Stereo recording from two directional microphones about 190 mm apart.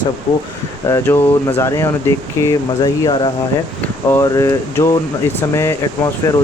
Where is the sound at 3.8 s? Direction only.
10° left (ahead or behind).